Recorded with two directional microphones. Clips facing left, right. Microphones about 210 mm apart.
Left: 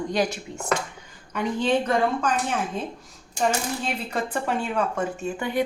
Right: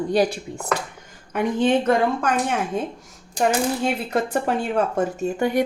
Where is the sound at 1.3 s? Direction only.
55° right (ahead or behind).